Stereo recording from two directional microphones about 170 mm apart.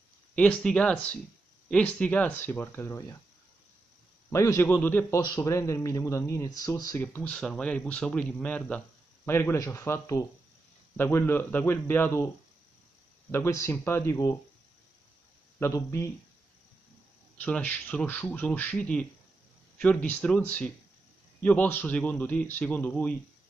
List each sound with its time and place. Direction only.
0.4 s speech: 5° left (ahead or behind)
4.3 s speech: 15° left (ahead or behind)
13.3 s speech: 15° left (ahead or behind)
15.6 s speech: 15° left (ahead or behind)
17.4 s speech: 10° left (ahead or behind)